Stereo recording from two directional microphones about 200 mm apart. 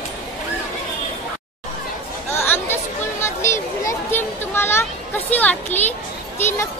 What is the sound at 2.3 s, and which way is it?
Chatter, 10° left (ahead or behind).